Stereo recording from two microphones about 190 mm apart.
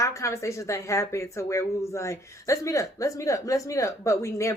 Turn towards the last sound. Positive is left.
turn(degrees=15)  # may be behind; listen again after turning